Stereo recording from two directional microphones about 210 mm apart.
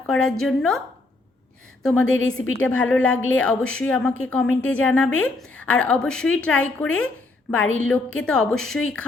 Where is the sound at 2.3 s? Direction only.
5° left (ahead or behind).